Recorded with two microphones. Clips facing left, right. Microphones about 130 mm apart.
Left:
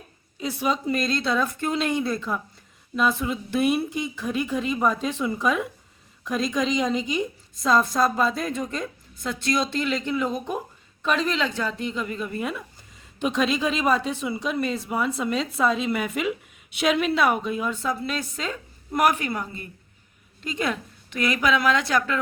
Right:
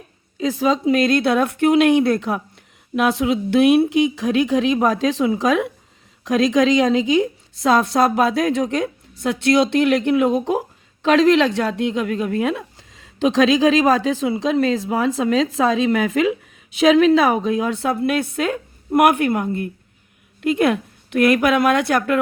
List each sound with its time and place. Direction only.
0.4 s a woman's voice: 85° right
11.0 s a woman's voice: 90° right; by 22.2 s 55° right (ahead or behind)